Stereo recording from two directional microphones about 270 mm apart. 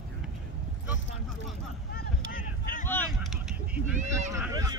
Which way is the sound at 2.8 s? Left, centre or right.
Centre.